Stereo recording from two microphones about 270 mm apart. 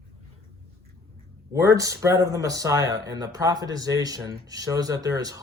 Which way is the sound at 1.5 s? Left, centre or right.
Centre.